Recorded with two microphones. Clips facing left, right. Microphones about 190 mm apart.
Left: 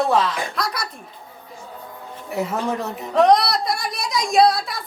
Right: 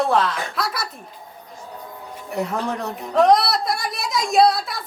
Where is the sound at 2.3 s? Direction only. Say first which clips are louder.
Left 1 dB; 5° left (ahead or behind).